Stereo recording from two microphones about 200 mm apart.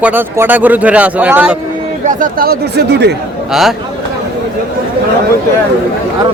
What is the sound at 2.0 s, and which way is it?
Speech, 45° right (ahead or behind).